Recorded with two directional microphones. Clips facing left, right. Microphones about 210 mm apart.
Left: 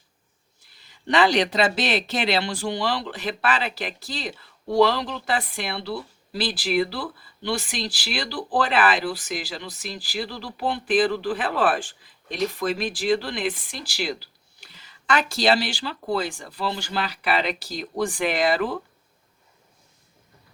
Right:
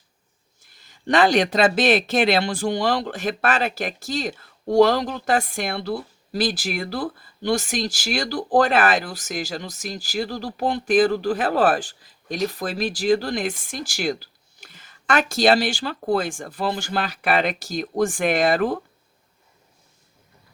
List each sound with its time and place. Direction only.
0.6 s speech: 45° right (ahead or behind)